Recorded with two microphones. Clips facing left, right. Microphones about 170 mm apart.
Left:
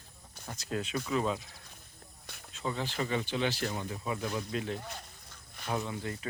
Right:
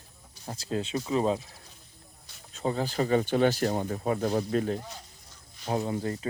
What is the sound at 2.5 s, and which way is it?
Speech, 40° right (ahead or behind).